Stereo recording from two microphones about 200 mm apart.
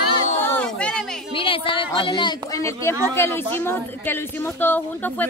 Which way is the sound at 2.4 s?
15° left (ahead or behind).